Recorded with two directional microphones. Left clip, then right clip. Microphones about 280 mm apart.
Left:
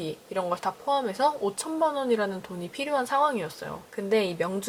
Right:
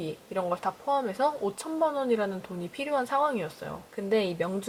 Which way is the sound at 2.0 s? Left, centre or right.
Centre.